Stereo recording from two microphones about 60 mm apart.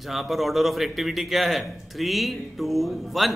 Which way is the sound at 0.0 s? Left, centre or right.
Centre.